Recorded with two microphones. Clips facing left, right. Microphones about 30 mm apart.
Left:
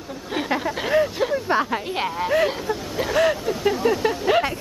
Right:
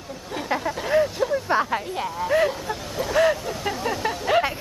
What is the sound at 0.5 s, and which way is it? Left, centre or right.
Vehicle, centre.